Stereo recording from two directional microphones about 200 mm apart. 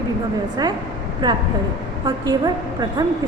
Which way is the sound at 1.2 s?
20° right (ahead or behind).